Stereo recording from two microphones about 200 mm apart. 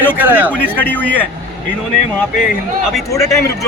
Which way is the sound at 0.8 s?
10° left (ahead or behind).